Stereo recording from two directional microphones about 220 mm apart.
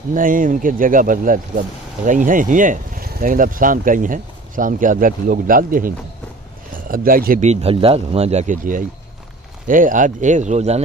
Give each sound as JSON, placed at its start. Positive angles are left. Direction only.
{"t": 0.1, "sound": "speech", "side_deg": -40}